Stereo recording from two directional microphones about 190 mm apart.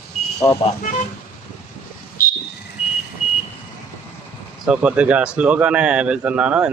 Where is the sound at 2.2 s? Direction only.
50° left (ahead or behind).